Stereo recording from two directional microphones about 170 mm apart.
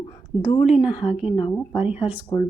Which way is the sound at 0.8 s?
5° right (ahead or behind).